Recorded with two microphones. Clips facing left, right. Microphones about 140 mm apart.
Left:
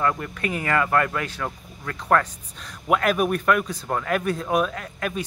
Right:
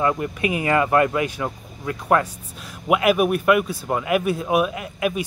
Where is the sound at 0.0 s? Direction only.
15° right (ahead or behind).